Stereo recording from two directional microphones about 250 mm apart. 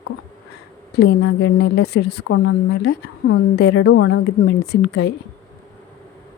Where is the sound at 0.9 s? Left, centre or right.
Left.